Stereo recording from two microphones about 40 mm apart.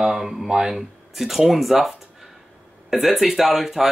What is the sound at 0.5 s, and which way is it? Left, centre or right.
Speech, centre.